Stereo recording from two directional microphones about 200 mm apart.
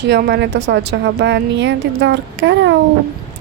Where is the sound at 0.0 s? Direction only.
55° right (ahead or behind).